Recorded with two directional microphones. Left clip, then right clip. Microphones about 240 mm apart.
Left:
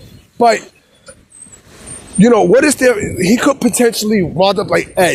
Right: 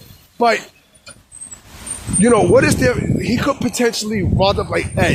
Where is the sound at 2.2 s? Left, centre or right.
Left.